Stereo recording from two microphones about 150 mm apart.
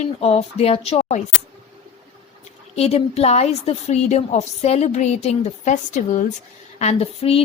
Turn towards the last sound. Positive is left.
turn(degrees=40)  # may be behind; listen again after turning